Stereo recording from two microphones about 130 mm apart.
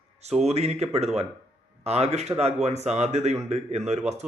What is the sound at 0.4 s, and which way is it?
Speech, 55° right (ahead or behind).